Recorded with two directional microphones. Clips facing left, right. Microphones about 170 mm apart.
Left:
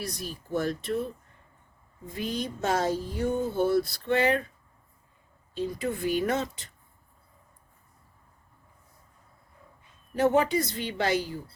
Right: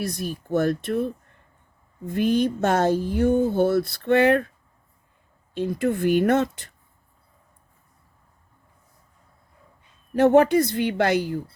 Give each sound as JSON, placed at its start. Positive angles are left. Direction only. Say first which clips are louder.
{"t": 0.0, "sound": "speech", "louder": "right 7 dB", "side_deg": -55}
{"t": 2.1, "sound": "speech", "louder": "right 11 dB", "side_deg": -60}
{"t": 5.5, "sound": "speech", "louder": "right 7 dB", "side_deg": -55}
{"t": 10.2, "sound": "speech", "louder": "right 7 dB", "side_deg": -55}